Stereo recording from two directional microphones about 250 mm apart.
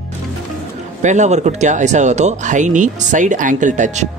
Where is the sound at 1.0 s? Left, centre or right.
Right.